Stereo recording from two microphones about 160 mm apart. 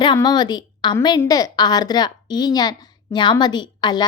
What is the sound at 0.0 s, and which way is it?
A woman's voice, 25° left (ahead or behind).